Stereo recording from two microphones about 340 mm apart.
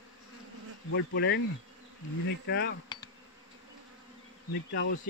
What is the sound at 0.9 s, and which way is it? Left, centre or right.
Speech, left.